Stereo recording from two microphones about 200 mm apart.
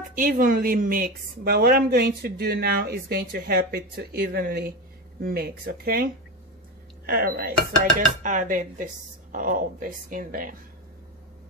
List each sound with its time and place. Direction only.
0.1 s a woman's voice: 45° right (ahead or behind)
7.1 s a woman's voice: 50° right (ahead or behind)
8.2 s dishes: 40° right (ahead or behind)
9.3 s a woman's voice: 45° right (ahead or behind)